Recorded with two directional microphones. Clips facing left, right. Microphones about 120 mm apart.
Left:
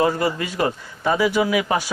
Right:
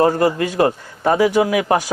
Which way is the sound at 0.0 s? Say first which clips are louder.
Right 5 dB; 45° right (ahead or behind).